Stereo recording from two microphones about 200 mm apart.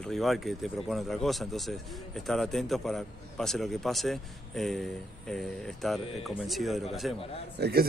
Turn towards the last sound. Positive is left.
turn(degrees=-55)  # may be behind; listen again after turning